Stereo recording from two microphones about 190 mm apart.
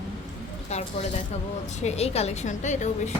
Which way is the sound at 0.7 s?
35° left (ahead or behind).